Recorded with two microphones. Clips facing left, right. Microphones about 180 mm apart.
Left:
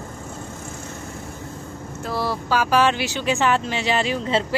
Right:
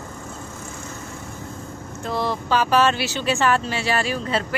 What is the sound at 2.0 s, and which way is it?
A woman's voice, 5° left (ahead or behind).